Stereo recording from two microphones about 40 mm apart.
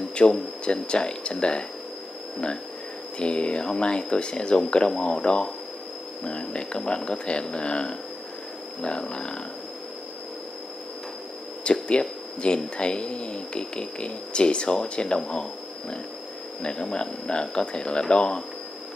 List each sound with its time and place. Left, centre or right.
0.1 s speech: left
11.6 s speech: left
16.9 s speech: left